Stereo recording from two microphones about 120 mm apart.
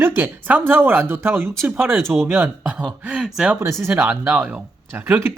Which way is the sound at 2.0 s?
Centre (ahead or behind).